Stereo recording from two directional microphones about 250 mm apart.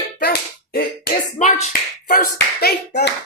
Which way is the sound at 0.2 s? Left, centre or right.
Left.